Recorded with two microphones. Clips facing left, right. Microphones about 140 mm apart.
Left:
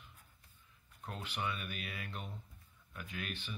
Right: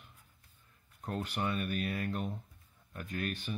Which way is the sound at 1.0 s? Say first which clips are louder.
Right 6 dB; 45° right (ahead or behind).